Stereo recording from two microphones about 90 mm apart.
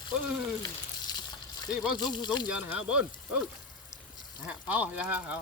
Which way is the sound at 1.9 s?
55° left (ahead or behind).